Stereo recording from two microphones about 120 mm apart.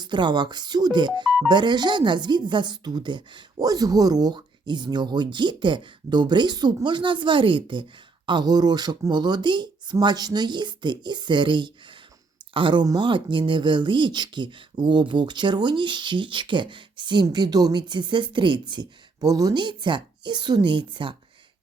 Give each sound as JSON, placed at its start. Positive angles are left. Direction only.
{"t": 0.0, "sound": "speech", "side_deg": -40}